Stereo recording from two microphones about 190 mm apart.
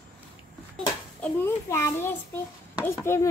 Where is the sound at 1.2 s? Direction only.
10° left (ahead or behind).